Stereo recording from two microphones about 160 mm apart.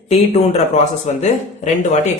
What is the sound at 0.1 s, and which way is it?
Speech, 40° left (ahead or behind).